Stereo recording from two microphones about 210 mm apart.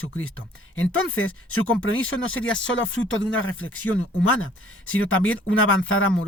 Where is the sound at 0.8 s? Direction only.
75° left (ahead or behind).